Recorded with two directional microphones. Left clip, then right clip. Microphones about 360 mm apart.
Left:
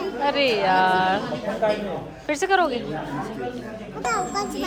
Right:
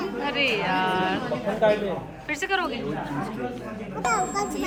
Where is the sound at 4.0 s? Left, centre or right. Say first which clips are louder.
Even; centre.